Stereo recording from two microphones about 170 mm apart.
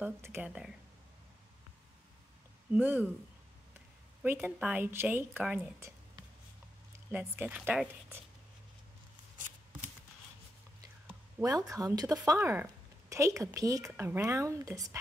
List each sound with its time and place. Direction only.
0.0 s speech: 10° right (ahead or behind)
2.7 s speech: 10° right (ahead or behind)
4.2 s speech: 10° right (ahead or behind)
7.1 s speech: 10° right (ahead or behind)
11.1 s speech: 15° right (ahead or behind)